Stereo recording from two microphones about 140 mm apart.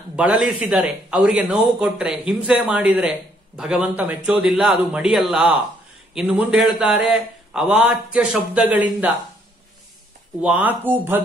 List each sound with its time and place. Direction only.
0.1 s a man's voice: 5° right (ahead or behind)
10.4 s a man's voice: 10° right (ahead or behind)